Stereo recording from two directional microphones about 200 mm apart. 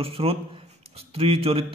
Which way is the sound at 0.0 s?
30° right (ahead or behind).